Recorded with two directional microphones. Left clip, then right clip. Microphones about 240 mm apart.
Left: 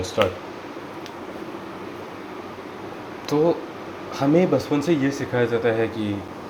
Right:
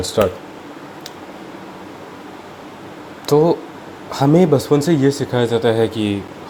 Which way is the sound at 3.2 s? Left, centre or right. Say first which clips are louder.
Right 6 dB; right.